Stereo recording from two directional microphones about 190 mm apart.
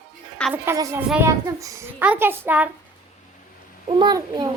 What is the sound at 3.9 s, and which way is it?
Speech, 20° right (ahead or behind).